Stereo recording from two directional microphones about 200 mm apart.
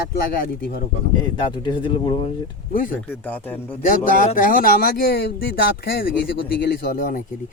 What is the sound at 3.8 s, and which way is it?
Speech, 45° left (ahead or behind).